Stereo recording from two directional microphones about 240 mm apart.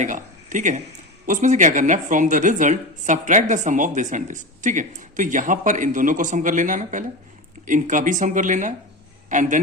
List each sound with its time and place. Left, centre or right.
0.0 s a woman's voice: right